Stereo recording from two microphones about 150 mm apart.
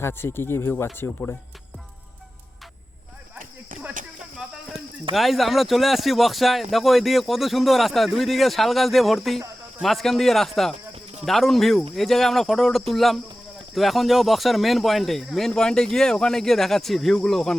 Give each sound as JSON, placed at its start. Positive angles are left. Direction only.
{"t": 0.0, "sound": "speech", "side_deg": 15}
{"t": 5.1, "sound": "speech", "side_deg": 0}